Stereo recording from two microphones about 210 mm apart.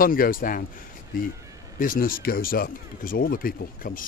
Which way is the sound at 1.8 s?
45° left (ahead or behind).